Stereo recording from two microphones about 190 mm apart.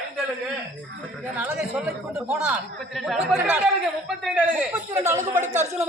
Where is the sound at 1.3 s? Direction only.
10° right (ahead or behind).